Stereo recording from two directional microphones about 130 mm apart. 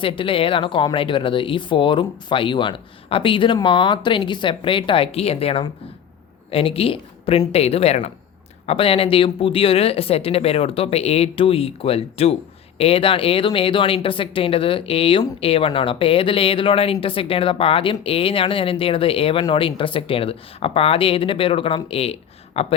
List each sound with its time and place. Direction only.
0.0 s speech: 45° left (ahead or behind)